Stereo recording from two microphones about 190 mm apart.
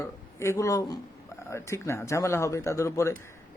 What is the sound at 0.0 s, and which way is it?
A man's voice, 15° left (ahead or behind).